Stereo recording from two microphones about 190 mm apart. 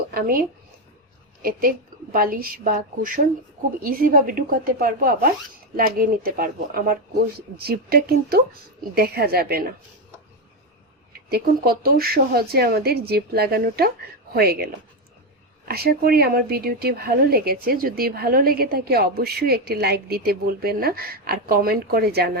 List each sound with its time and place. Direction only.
0.1 s a woman's voice: 50° right (ahead or behind)
11.1 s speech: 55° right (ahead or behind)